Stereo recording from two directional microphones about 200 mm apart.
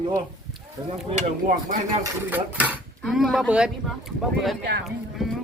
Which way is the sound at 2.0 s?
10° right (ahead or behind).